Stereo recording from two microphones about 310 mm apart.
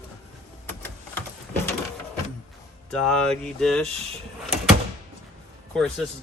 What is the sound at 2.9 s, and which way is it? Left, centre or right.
Speech, centre.